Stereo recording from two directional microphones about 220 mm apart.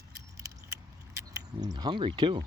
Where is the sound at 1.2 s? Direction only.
15° right (ahead or behind).